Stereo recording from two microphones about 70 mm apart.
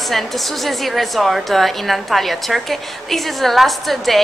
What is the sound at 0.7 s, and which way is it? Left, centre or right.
A woman's voice, centre.